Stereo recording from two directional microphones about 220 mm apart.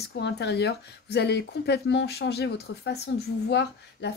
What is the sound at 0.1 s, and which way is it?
Speech, 50° left (ahead or behind).